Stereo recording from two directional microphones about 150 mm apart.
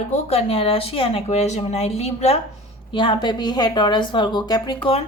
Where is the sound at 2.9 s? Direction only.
30° left (ahead or behind).